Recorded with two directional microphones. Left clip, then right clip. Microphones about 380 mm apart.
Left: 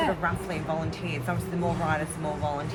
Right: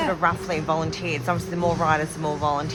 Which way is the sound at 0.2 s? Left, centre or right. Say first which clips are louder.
Right 7 dB; centre.